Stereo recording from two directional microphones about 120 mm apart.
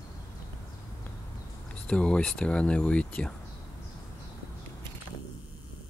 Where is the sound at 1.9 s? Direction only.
10° left (ahead or behind).